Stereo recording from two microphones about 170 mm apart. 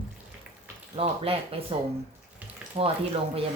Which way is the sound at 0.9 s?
35° right (ahead or behind).